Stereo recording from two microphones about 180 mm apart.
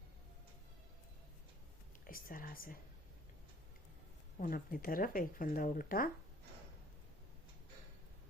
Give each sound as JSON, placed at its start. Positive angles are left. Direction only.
{"t": 2.0, "sound": "speech", "side_deg": 50}
{"t": 4.4, "sound": "speech", "side_deg": 50}